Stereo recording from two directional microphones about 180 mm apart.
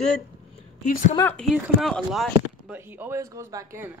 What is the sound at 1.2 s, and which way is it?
Speech, 10° left (ahead or behind).